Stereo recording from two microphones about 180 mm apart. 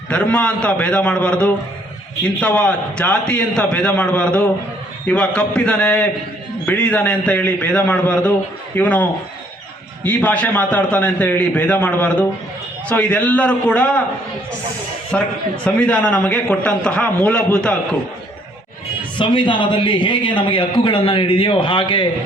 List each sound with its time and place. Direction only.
0.1 s a man's voice: 5° left (ahead or behind)
15.1 s a man's voice: 5° left (ahead or behind)
19.2 s a man's voice: 25° left (ahead or behind)